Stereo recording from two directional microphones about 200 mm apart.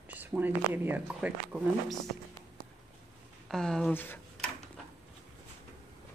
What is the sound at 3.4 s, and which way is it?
Speech, centre (ahead or behind).